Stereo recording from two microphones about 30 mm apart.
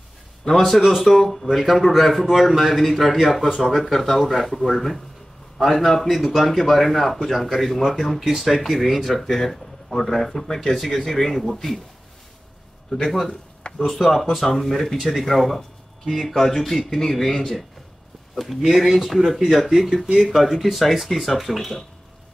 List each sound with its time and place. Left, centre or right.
0.5 s speech: centre
8.2 s speech: centre
9.0 s speech: centre
13.3 s a sound: left
13.8 s speech: centre
18.3 s a man's voice: centre